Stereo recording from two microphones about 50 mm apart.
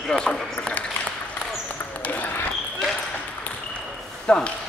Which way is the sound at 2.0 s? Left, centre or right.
Left.